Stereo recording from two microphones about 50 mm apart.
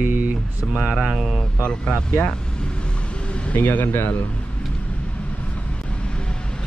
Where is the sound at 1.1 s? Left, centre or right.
Centre.